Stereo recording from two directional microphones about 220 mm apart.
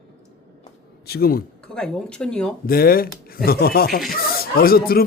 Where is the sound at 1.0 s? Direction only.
45° left (ahead or behind).